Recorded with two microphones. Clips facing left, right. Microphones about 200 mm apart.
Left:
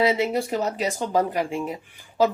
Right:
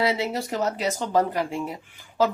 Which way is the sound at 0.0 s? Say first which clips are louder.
Left 3 dB; 15° left (ahead or behind).